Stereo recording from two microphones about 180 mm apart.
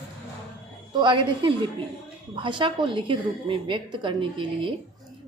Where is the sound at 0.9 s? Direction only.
25° right (ahead or behind).